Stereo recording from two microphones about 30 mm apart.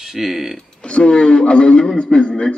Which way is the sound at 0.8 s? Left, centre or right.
Left.